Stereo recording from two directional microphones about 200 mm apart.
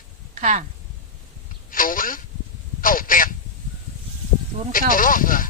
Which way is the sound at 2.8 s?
45° left (ahead or behind).